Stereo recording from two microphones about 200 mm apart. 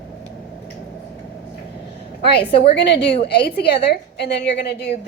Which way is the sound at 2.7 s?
60° left (ahead or behind).